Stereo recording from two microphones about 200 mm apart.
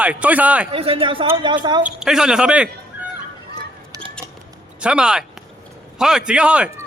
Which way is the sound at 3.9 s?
20° right (ahead or behind).